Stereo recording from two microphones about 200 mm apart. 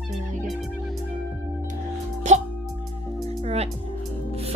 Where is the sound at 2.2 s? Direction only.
35° right (ahead or behind).